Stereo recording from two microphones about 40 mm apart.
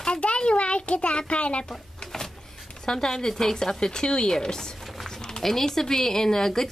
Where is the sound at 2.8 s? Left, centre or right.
Centre.